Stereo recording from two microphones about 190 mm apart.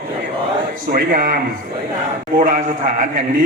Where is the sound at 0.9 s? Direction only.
50° right (ahead or behind).